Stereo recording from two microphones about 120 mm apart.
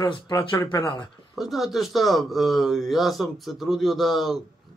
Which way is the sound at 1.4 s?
Centre (ahead or behind).